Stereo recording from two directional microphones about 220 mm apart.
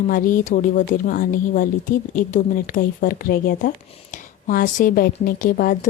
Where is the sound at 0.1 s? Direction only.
40° left (ahead or behind).